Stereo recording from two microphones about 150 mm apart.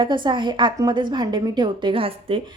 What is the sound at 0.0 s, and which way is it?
A woman's voice, 30° right (ahead or behind).